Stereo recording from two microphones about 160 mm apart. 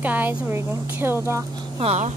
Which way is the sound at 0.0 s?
10° right (ahead or behind).